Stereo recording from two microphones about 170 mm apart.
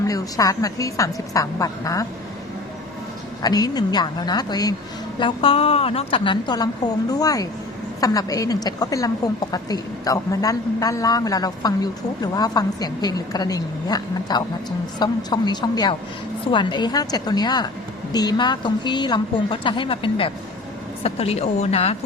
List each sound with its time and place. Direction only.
0.0 s a woman's voice: 20° left (ahead or behind)
3.4 s a woman's voice: 25° left (ahead or behind)